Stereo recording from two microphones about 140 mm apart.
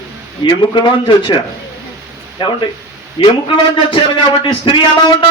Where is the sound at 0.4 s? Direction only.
35° left (ahead or behind).